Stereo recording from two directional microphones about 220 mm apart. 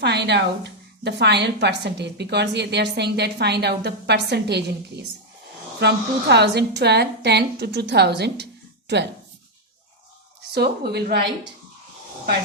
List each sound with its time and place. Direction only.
0.0 s a woman's voice: 50° right (ahead or behind)
5.8 s a woman's voice: 50° right (ahead or behind)
10.5 s a woman's voice: 45° right (ahead or behind)